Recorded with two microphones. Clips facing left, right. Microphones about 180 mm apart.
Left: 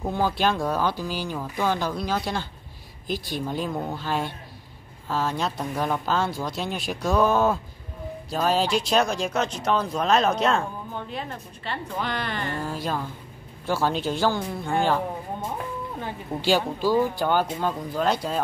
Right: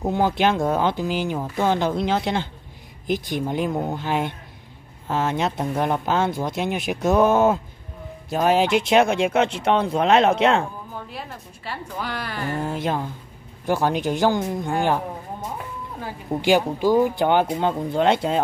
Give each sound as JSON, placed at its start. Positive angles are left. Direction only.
{"t": 0.0, "sound": "speech", "side_deg": -20}
{"t": 10.9, "sound": "a woman's voice", "side_deg": -5}
{"t": 12.6, "sound": "speech", "side_deg": -20}
{"t": 16.3, "sound": "speech", "side_deg": -15}